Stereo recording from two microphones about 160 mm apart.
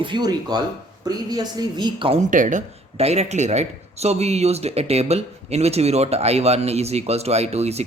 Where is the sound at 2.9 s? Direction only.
40° right (ahead or behind).